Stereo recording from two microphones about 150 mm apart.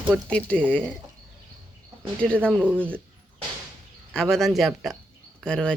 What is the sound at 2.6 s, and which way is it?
Speech, 10° right (ahead or behind).